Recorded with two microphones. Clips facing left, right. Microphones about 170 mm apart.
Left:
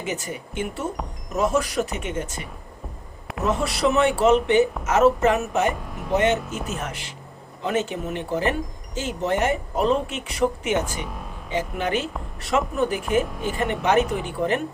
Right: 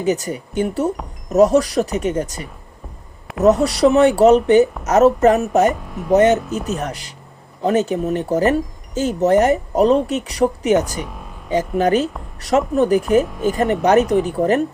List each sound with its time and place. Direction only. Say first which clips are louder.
0.0 s speech: right 10 dB; 40° right (ahead or behind)
11.0 s speech: right 1 dB; centre (ahead or behind)
11.5 s speech: right 8 dB; 40° right (ahead or behind)